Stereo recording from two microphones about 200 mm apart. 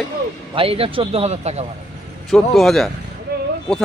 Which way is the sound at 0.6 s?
25° right (ahead or behind).